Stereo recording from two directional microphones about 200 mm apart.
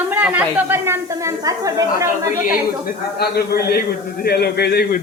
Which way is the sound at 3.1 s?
50° left (ahead or behind).